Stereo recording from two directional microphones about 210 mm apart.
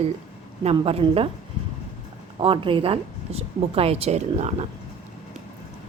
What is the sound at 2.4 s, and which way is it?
Speech, 25° right (ahead or behind).